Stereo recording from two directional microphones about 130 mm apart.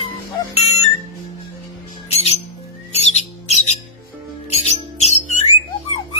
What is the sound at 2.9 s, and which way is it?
Music, 55° left (ahead or behind).